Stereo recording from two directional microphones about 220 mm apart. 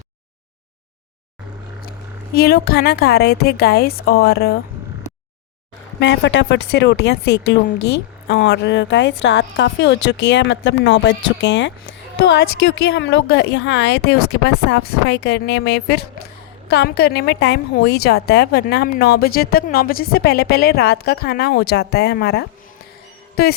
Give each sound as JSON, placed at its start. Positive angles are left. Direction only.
{"t": 2.3, "sound": "a woman's voice", "side_deg": 45}
{"t": 6.0, "sound": "a woman's voice", "side_deg": 55}
{"t": 12.9, "sound": "a woman's voice", "side_deg": 55}